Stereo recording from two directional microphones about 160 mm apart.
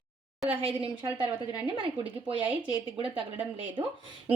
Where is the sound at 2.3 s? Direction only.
10° right (ahead or behind).